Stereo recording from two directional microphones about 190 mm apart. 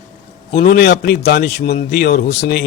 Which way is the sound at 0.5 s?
50° left (ahead or behind).